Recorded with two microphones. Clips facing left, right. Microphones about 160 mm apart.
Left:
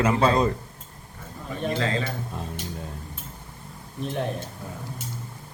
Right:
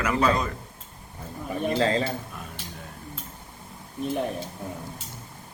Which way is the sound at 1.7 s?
35° right (ahead or behind).